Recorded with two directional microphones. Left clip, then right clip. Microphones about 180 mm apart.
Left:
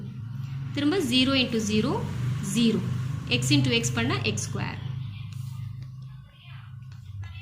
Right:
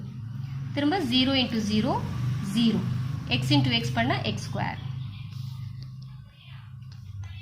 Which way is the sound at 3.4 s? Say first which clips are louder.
Even; 45° right (ahead or behind).